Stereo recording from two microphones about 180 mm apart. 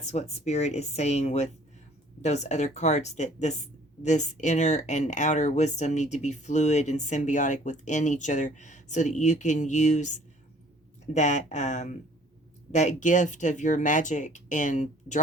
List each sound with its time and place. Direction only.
0.0 s speech: 40° left (ahead or behind)